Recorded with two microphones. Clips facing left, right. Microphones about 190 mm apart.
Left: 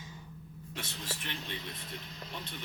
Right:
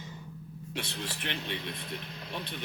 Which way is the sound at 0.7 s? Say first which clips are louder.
Right 4 dB; 70° right (ahead or behind).